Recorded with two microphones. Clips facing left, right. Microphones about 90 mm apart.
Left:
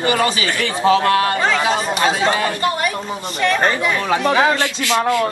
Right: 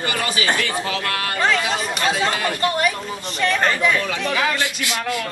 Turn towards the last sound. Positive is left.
turn(degrees=35)  # may be behind; listen again after turning